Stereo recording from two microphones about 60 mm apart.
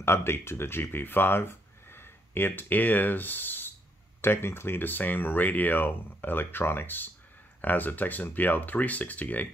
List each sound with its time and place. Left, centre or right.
0.0 s speech: left